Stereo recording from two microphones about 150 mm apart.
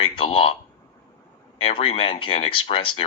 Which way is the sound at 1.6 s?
35° left (ahead or behind).